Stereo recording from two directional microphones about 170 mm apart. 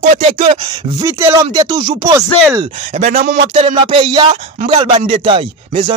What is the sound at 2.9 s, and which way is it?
Speech, 40° right (ahead or behind).